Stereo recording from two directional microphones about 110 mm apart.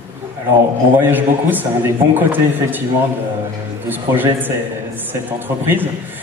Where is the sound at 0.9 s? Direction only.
15° right (ahead or behind).